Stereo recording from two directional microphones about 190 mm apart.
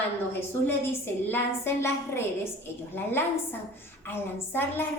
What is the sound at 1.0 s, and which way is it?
A woman's voice, 10° left (ahead or behind).